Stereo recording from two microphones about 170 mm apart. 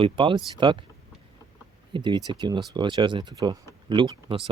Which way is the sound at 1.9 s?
30° right (ahead or behind).